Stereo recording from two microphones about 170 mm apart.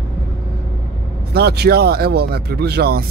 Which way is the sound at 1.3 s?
70° right (ahead or behind).